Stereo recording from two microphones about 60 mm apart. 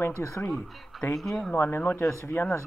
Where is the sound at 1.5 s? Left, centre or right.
Left.